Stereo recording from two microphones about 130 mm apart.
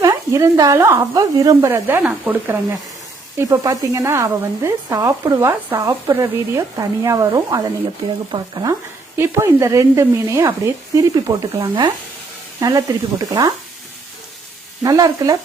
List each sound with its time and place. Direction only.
0.0 s speech: 25° right (ahead or behind)
9.1 s speech: 20° right (ahead or behind)
11.6 s speech: 35° right (ahead or behind)
12.5 s speech: 25° right (ahead or behind)
14.8 s speech: 30° right (ahead or behind)